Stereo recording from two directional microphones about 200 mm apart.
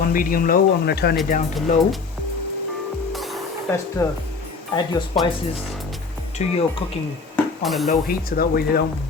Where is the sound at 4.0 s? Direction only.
15° left (ahead or behind).